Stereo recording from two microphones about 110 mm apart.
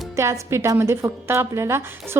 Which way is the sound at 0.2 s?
25° right (ahead or behind).